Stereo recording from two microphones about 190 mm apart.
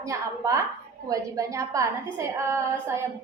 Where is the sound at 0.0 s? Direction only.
15° right (ahead or behind).